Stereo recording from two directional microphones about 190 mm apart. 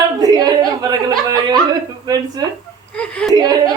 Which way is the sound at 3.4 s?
20° right (ahead or behind).